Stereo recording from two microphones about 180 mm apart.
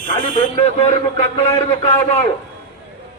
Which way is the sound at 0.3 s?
35° left (ahead or behind).